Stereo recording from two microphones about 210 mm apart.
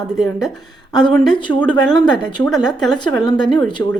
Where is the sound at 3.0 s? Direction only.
20° left (ahead or behind).